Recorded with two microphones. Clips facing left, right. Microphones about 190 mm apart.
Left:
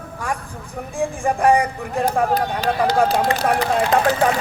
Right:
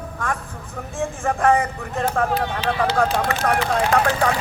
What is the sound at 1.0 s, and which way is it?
Speech, 15° left (ahead or behind).